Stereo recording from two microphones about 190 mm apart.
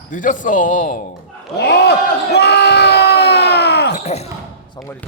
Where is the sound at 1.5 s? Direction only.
65° left (ahead or behind).